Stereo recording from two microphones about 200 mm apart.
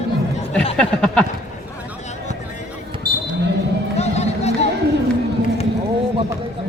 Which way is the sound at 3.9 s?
35° left (ahead or behind).